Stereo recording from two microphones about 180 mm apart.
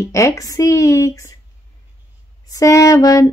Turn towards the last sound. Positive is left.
turn(degrees=20)  # may be behind; listen again after turning